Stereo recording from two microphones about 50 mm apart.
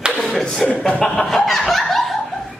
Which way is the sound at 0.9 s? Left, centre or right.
Centre.